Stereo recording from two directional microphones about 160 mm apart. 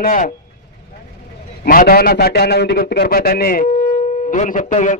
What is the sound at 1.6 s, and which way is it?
A man's voice, 70° left (ahead or behind).